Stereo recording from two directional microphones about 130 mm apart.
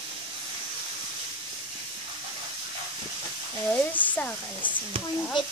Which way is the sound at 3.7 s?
10° left (ahead or behind).